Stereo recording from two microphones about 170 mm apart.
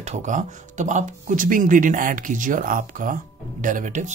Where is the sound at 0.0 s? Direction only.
45° right (ahead or behind).